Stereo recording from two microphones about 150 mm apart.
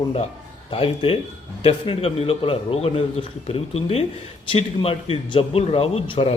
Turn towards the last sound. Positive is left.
turn(degrees=40)  # may be behind; listen again after turning